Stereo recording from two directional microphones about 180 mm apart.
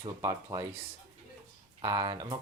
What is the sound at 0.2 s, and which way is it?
Speech, 20° right (ahead or behind).